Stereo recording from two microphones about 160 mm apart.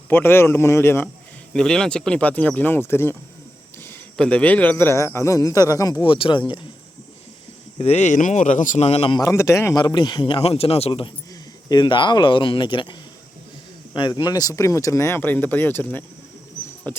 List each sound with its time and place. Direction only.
0.1 s a man's voice: 15° left (ahead or behind)
1.5 s a man's voice: 5° left (ahead or behind); by 6.4 s 30° left (ahead or behind)
7.8 s speech: 45° left (ahead or behind)
9.2 s a man's voice: 20° left (ahead or behind)